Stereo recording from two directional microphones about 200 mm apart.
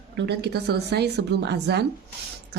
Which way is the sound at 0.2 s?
55° right (ahead or behind).